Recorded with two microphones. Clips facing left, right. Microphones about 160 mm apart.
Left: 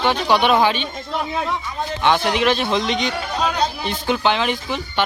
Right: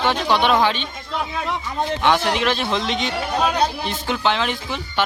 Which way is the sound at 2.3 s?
Centre (ahead or behind).